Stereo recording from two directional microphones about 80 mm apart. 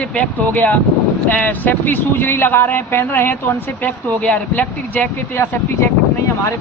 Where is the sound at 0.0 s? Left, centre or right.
Centre.